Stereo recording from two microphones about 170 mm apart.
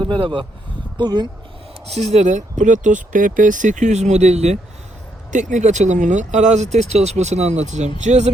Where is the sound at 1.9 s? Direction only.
40° right (ahead or behind).